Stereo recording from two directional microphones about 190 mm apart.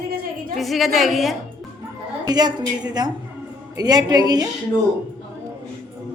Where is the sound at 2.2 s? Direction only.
20° right (ahead or behind).